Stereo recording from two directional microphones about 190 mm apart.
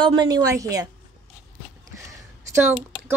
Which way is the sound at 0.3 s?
20° right (ahead or behind).